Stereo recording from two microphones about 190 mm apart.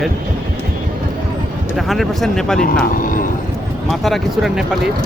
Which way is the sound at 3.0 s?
45° left (ahead or behind).